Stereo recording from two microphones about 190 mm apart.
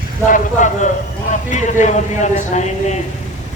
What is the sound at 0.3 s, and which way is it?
A man's voice, 40° left (ahead or behind).